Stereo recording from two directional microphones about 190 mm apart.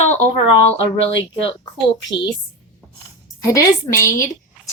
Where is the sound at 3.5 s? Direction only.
15° left (ahead or behind).